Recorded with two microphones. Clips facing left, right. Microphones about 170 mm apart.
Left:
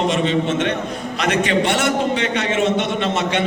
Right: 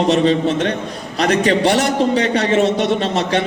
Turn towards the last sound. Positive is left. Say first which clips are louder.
# right 3 dB
turn(degrees=-35)  # may be behind; listen again after turning